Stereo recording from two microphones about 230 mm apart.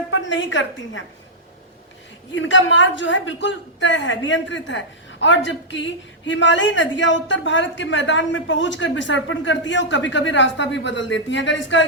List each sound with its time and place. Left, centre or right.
0.1 s a woman's voice: left
2.3 s speech: left